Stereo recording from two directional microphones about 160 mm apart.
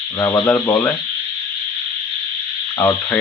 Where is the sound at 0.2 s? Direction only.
15° left (ahead or behind).